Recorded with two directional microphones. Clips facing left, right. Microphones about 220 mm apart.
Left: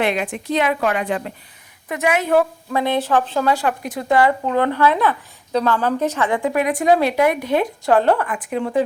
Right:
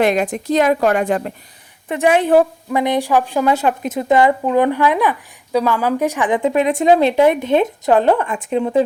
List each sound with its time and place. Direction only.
0.0 s a woman's voice: 40° right (ahead or behind)
1.9 s a woman's voice: 30° right (ahead or behind)
2.7 s a woman's voice: 15° right (ahead or behind)